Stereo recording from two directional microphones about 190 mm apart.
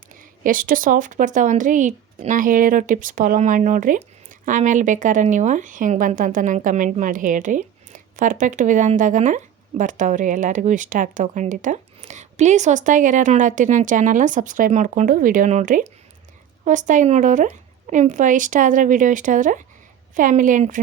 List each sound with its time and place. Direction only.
0.1 s speech: 45° right (ahead or behind)